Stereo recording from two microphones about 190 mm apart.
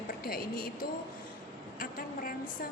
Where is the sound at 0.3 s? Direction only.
50° left (ahead or behind).